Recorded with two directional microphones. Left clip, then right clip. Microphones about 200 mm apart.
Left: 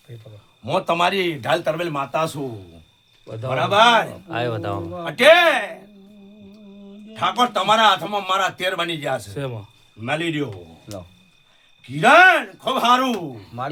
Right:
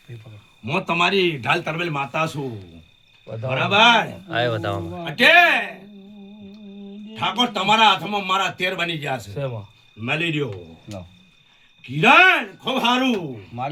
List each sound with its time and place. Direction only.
0.6 s a man's voice: 30° left (ahead or behind)
3.6 s speech: 15° left (ahead or behind)
7.1 s a man's voice: 20° left (ahead or behind)
11.9 s a man's voice: 20° left (ahead or behind)